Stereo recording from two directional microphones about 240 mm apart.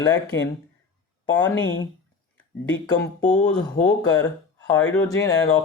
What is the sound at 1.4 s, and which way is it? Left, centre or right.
Speech, centre.